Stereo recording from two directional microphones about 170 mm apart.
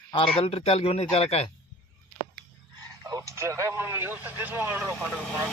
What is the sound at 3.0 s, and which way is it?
Speech, 20° right (ahead or behind).